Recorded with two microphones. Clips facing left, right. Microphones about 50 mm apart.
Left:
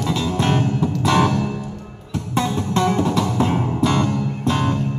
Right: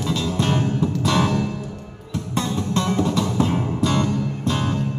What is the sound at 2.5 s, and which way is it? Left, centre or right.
Music, left.